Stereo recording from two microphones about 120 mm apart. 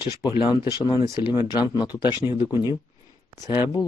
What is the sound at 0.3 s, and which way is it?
Speech, 40° left (ahead or behind).